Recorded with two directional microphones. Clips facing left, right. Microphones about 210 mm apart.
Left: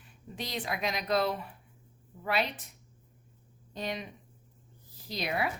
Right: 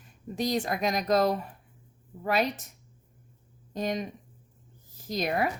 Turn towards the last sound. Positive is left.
turn(degrees=-45)  # may be behind; listen again after turning